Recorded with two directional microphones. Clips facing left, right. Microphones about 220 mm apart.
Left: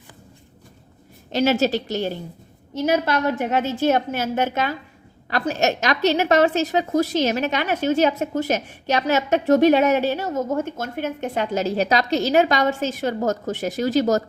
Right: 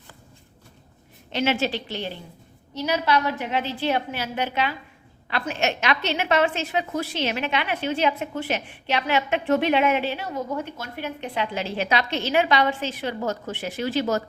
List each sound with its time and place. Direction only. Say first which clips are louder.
1.3 s a woman's voice: left 5 dB; 40° left (ahead or behind)